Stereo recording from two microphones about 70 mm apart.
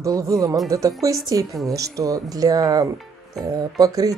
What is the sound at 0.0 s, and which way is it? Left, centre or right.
Speech, right.